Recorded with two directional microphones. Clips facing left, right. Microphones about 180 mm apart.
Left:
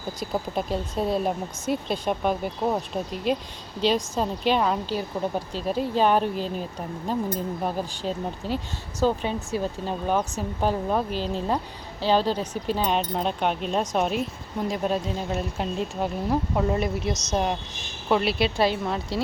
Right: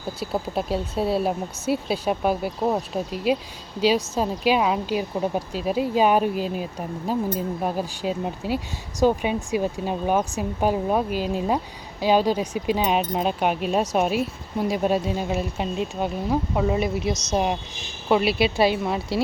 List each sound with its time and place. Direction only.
0.2 s speech: 5° right (ahead or behind)